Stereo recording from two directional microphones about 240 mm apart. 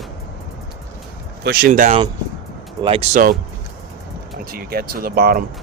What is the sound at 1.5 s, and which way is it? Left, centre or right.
Speech, right.